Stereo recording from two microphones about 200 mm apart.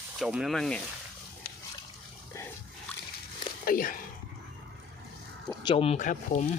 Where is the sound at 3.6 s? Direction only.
45° left (ahead or behind).